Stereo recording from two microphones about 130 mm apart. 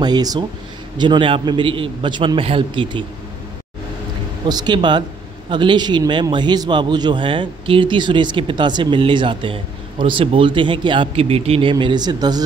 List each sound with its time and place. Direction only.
0.0 s a man's voice: 30° right (ahead or behind)
4.5 s a man's voice: 35° right (ahead or behind); by 11.7 s 50° right (ahead or behind)
11.7 s a man's voice: 35° right (ahead or behind)